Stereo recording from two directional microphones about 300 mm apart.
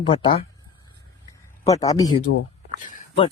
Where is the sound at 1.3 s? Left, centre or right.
Centre.